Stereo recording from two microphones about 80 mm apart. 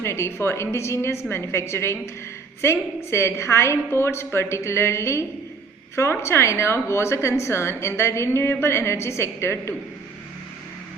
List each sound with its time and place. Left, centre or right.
0.0 s a woman's voice: left